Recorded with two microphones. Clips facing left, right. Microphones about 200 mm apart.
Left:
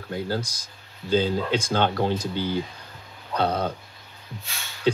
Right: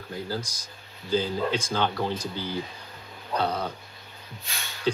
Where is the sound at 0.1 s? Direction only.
60° left (ahead or behind).